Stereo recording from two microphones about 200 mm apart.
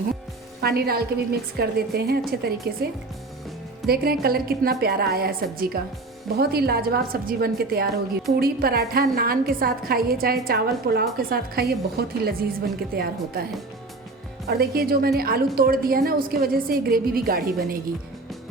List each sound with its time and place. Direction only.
0.6 s a woman's voice: 50° right (ahead or behind)
3.8 s a woman's voice: 50° right (ahead or behind)